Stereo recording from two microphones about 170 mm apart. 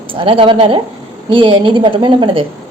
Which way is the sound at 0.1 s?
30° right (ahead or behind).